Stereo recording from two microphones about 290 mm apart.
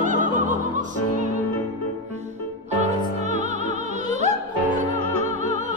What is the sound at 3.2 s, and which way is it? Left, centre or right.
Music, right.